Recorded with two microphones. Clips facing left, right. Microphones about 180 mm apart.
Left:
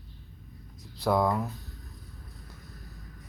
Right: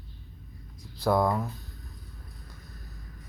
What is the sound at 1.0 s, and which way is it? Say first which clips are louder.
Speech: right 1 dB; centre (ahead or behind).